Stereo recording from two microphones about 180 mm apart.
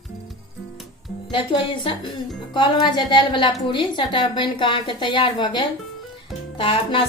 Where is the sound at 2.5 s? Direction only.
25° left (ahead or behind).